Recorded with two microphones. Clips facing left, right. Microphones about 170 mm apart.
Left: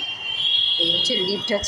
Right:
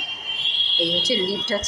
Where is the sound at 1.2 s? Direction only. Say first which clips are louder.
Left 1 dB; 15° left (ahead or behind).